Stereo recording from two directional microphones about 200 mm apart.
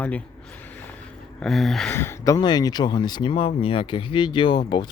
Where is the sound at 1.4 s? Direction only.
Centre (ahead or behind).